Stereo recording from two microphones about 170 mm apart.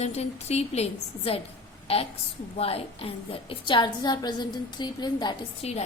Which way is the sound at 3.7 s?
25° left (ahead or behind).